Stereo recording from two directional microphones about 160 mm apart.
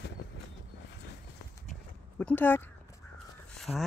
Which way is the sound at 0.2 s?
90° left.